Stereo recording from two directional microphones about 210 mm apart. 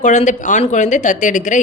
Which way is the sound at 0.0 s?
35° left (ahead or behind).